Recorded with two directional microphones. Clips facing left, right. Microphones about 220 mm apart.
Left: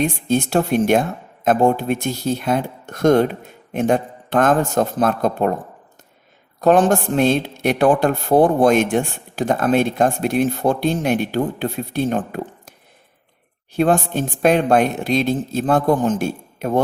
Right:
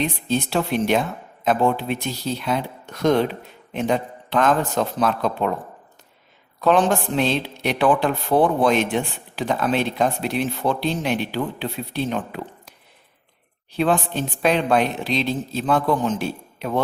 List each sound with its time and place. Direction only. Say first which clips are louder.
0.0 s speech: left 4 dB; 45° left (ahead or behind)
6.6 s speech: left 4 dB; 45° left (ahead or behind)
13.7 s speech: left 4 dB; 45° left (ahead or behind)